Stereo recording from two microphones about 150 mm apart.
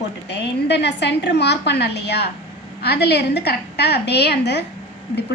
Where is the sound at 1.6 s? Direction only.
90° left.